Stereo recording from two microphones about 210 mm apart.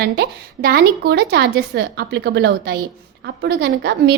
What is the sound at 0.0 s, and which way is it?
A woman's voice, 50° right (ahead or behind).